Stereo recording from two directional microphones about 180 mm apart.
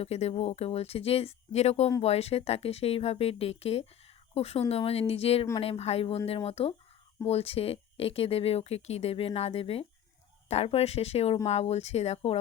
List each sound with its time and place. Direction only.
0.0 s speech: 35° left (ahead or behind)